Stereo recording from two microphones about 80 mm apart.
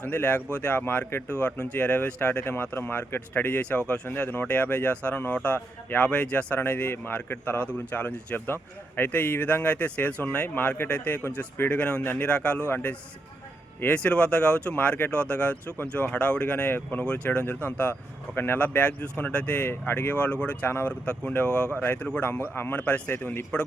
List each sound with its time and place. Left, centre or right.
0.0 s speech: centre
18.6 s speech: centre